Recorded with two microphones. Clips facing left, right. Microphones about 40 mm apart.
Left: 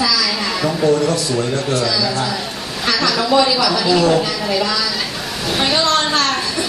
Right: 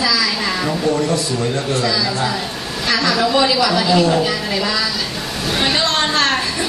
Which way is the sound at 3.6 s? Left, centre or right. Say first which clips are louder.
Even; right.